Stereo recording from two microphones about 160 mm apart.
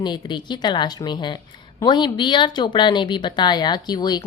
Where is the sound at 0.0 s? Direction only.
30° left (ahead or behind).